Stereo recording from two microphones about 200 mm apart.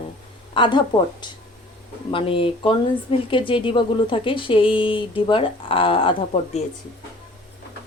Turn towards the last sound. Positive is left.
turn(degrees=25)  # may be behind; listen again after turning